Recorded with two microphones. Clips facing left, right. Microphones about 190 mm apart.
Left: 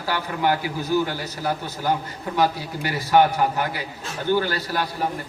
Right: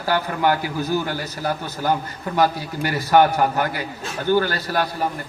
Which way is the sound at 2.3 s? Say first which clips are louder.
Right 2 dB; 50° right (ahead or behind).